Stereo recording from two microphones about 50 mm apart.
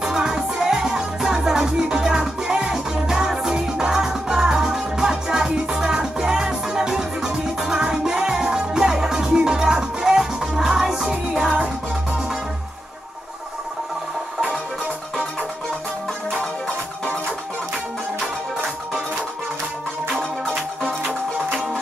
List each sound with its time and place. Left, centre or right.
0.0 s music: centre
11.5 s music: right
16.6 s music: centre